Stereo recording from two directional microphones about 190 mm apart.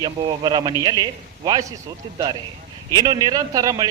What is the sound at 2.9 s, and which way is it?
Speech, 20° right (ahead or behind).